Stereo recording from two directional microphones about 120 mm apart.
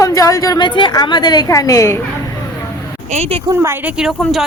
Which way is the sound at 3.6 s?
20° right (ahead or behind).